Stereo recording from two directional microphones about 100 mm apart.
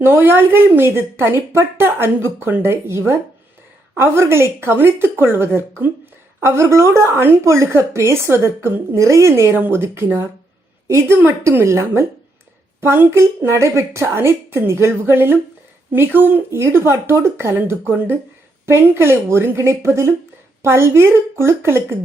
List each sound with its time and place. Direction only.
0.0 s a woman's voice: 20° right (ahead or behind)